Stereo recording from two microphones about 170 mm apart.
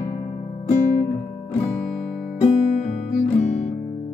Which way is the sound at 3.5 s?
40° left (ahead or behind).